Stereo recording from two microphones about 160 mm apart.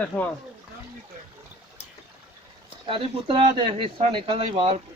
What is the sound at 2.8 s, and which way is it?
Speech, 35° right (ahead or behind).